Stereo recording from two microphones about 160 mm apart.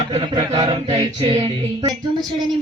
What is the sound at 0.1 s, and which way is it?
Music, 30° right (ahead or behind).